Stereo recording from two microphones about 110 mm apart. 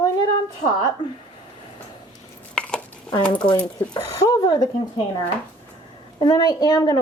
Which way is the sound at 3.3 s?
45° left (ahead or behind).